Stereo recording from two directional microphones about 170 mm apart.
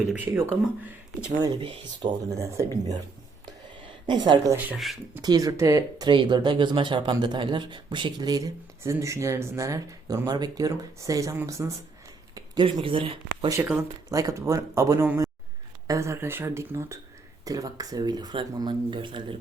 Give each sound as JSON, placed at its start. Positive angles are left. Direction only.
{"t": 0.1, "sound": "speech", "side_deg": -10}
{"t": 1.4, "sound": "speech", "side_deg": -25}
{"t": 4.0, "sound": "speech", "side_deg": -25}
{"t": 4.5, "sound": "speech", "side_deg": -10}
{"t": 5.2, "sound": "speech", "side_deg": -20}
{"t": 14.1, "sound": "speech", "side_deg": -20}